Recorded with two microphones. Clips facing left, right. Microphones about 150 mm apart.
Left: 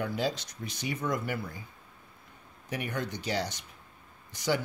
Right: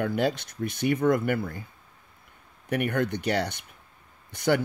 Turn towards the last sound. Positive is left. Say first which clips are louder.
# right 6 dB
turn(degrees=-60)  # may be behind; listen again after turning